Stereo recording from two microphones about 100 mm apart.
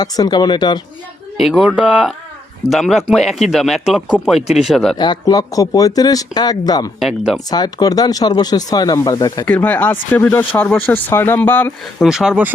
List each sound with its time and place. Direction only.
0.0 s speech: 45° left (ahead or behind)
1.4 s speech: 5° right (ahead or behind)
5.2 s speech: 40° left (ahead or behind)
9.6 s speech: 15° left (ahead or behind)
12.0 s speech: 5° right (ahead or behind)